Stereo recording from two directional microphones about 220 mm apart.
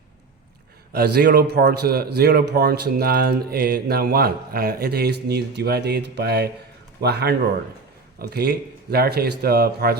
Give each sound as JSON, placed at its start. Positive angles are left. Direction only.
{"t": 0.9, "sound": "a man's voice", "side_deg": -45}